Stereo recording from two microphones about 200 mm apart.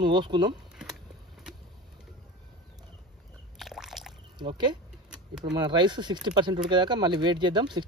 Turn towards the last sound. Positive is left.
turn(degrees=-20)  # may be behind; listen again after turning